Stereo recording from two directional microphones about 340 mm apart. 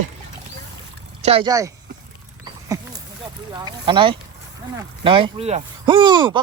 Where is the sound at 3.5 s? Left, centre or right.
Centre.